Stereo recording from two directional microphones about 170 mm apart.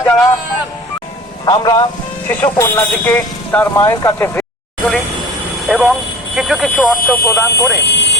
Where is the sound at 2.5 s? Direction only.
10° left (ahead or behind).